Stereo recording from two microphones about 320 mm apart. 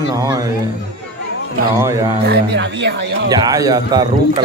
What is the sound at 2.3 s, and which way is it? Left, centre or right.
Speech, right.